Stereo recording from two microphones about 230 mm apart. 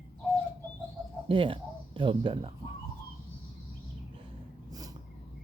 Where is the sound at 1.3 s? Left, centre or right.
Right.